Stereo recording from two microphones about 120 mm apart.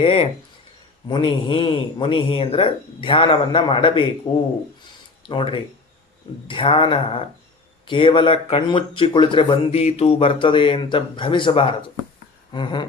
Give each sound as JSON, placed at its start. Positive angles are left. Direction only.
{"t": 0.0, "sound": "speech", "side_deg": 50}
{"t": 1.0, "sound": "speech", "side_deg": 40}